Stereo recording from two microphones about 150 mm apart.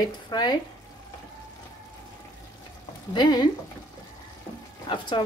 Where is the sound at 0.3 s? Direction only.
25° left (ahead or behind).